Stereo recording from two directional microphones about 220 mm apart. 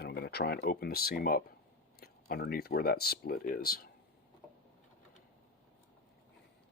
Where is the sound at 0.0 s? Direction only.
45° left (ahead or behind).